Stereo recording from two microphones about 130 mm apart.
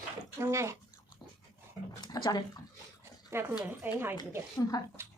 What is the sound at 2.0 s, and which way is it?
Speech, 35° left (ahead or behind).